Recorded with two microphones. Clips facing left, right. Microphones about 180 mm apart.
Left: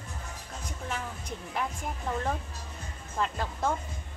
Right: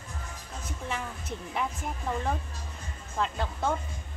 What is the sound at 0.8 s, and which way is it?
Speech, centre (ahead or behind).